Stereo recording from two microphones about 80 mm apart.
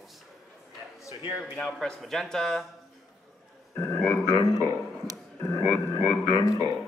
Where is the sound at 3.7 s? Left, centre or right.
Left.